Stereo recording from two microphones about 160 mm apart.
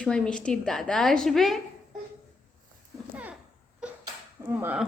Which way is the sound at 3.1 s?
10° right (ahead or behind).